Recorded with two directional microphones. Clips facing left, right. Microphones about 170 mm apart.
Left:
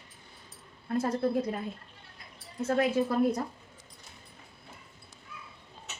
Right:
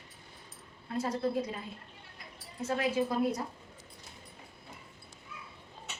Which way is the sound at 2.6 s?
55° left (ahead or behind).